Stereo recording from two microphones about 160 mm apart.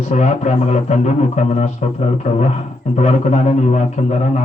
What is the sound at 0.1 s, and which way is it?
Speech, 45° left (ahead or behind).